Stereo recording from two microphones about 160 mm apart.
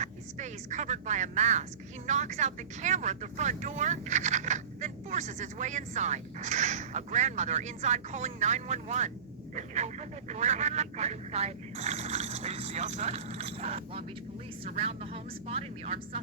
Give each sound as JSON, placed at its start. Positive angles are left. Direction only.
{"t": 0.0, "sound": "speech", "side_deg": -50}